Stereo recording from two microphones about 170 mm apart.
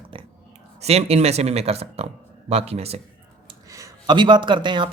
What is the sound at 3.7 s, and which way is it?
A man's voice, 20° right (ahead or behind).